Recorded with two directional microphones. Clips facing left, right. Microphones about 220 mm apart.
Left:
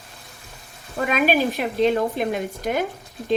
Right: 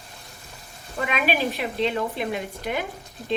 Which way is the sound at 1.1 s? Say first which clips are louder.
Left 5 dB; 45° left (ahead or behind).